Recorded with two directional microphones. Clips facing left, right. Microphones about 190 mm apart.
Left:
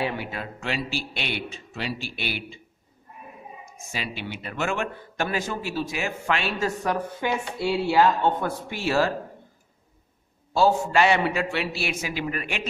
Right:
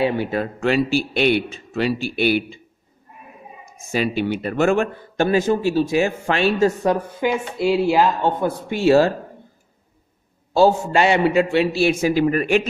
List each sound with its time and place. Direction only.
0.0 s a man's voice: 30° right (ahead or behind)
0.4 s a man's voice: 50° right (ahead or behind)
3.9 s a man's voice: 45° right (ahead or behind)
5.1 s a man's voice: 25° right (ahead or behind)
7.9 s a man's voice: 15° right (ahead or behind)
8.8 s a man's voice: 25° right (ahead or behind)
10.5 s a man's voice: 25° right (ahead or behind); by 12.6 s 45° right (ahead or behind)